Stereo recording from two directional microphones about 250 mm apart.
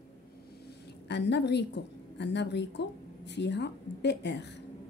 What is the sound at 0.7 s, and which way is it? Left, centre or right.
A woman's voice, left.